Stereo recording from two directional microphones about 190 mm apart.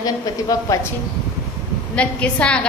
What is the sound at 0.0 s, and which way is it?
Speech, 20° left (ahead or behind).